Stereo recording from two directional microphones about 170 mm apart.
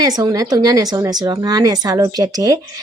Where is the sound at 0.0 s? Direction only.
20° right (ahead or behind).